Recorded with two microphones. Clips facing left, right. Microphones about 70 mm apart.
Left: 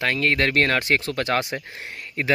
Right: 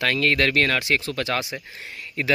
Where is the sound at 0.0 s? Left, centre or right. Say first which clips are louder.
Even; left.